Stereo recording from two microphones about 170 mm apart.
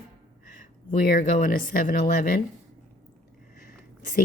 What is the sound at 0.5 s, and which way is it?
Speech, 55° left (ahead or behind).